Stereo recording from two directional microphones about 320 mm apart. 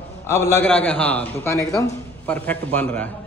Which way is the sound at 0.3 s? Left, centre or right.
Centre.